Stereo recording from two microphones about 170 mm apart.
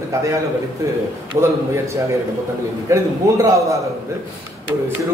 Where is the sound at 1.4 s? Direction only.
30° right (ahead or behind).